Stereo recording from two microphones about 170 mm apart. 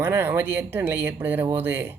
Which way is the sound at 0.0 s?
10° right (ahead or behind).